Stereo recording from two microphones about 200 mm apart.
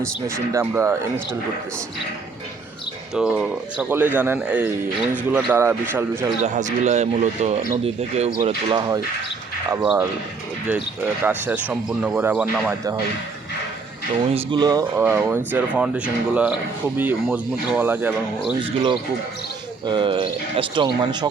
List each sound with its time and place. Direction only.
0.0 s speech: 15° right (ahead or behind)
3.2 s speech: 5° right (ahead or behind)
6.4 s speech: 35° right (ahead or behind); by 12.7 s 5° right (ahead or behind)
14.3 s speech: 20° right (ahead or behind)
19.8 s speech: 25° right (ahead or behind)